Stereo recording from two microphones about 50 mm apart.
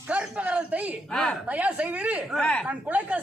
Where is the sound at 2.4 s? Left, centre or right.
Left.